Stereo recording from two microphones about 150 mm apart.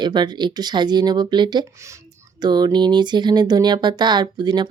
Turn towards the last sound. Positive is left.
turn(degrees=-30)  # may be behind; listen again after turning